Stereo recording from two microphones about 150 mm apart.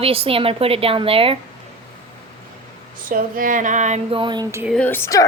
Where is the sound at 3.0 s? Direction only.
65° right (ahead or behind).